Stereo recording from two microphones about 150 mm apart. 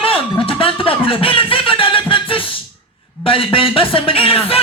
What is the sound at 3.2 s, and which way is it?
Music, 35° left (ahead or behind).